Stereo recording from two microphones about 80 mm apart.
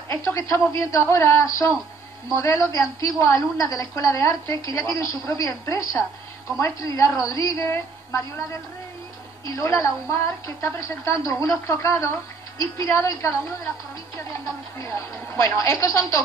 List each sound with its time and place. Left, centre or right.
0.1 s a woman's voice: left
9.6 s a woman's voice: left
14.8 s a woman's voice: left